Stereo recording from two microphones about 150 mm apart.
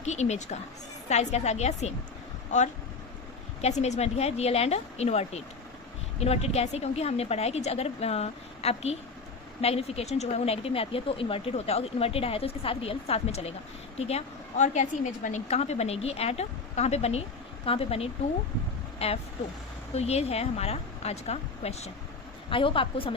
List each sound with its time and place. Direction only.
0.0 s a woman's voice: 50° left (ahead or behind)
3.6 s a woman's voice: 50° left (ahead or behind)